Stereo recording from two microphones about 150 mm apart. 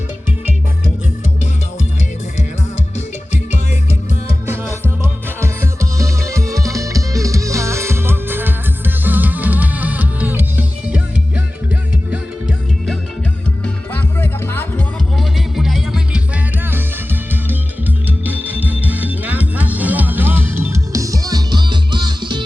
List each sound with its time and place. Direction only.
4.4 s music: 15° right (ahead or behind)
13.9 s music: 15° left (ahead or behind)
15.2 s music: centre (ahead or behind); by 22.4 s 30° right (ahead or behind)